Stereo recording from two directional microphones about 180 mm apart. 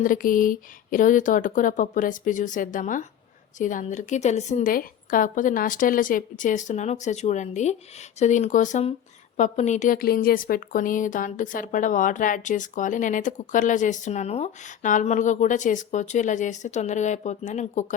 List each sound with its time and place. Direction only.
0.0 s a woman's voice: 50° left (ahead or behind)